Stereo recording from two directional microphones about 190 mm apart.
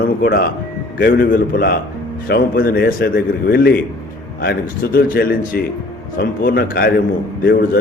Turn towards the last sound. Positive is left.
turn(degrees=50)  # may be behind; listen again after turning